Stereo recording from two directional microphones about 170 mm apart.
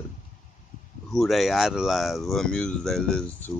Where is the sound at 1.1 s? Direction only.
Centre (ahead or behind).